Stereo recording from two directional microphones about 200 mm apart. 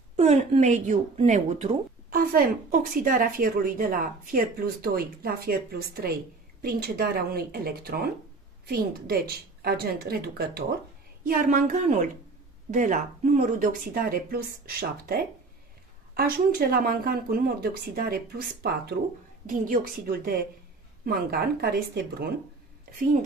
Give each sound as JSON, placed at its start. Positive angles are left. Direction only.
{"t": 0.1, "sound": "speech", "side_deg": -35}
{"t": 11.2, "sound": "a woman's voice", "side_deg": -45}